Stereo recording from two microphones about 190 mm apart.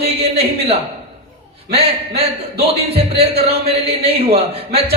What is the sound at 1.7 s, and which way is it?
A man's voice, 30° right (ahead or behind).